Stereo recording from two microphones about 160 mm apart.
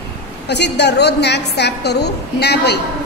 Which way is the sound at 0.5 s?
90° left.